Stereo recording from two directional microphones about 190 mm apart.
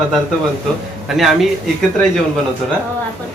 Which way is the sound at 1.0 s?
Centre (ahead or behind).